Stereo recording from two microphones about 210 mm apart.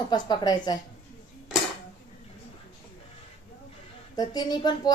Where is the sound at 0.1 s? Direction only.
20° left (ahead or behind).